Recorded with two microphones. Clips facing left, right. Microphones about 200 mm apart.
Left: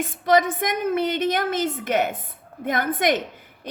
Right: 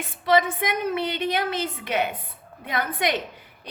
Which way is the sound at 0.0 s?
45° left (ahead or behind).